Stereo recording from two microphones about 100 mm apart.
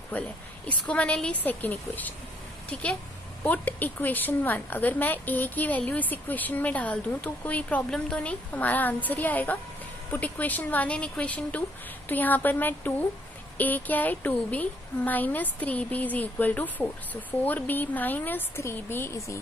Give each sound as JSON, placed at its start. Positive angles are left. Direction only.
{"t": 0.1, "sound": "a woman's voice", "side_deg": 15}